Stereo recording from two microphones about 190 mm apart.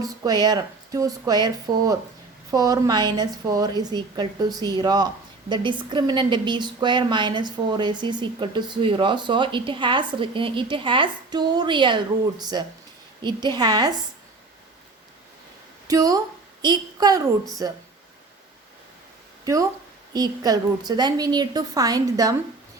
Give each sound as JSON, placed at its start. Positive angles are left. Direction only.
{"t": 0.0, "sound": "a woman's voice", "side_deg": -20}
{"t": 15.9, "sound": "a woman's voice", "side_deg": -20}
{"t": 20.1, "sound": "a woman's voice", "side_deg": -20}